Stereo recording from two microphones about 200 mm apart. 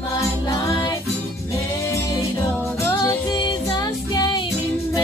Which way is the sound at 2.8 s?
15° left (ahead or behind).